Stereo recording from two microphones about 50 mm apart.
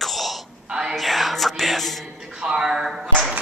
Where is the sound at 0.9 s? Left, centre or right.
Centre.